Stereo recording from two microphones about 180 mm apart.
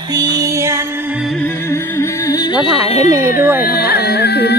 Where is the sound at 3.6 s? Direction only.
60° left (ahead or behind).